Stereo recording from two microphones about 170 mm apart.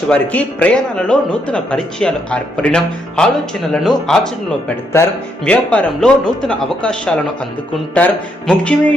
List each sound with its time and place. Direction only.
0.1 s a man's voice: 10° left (ahead or behind)
5.0 s speech: 15° left (ahead or behind)
5.5 s a man's voice: 5° left (ahead or behind)